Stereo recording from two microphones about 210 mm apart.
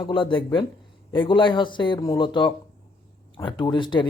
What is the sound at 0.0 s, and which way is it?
Speech, 25° left (ahead or behind).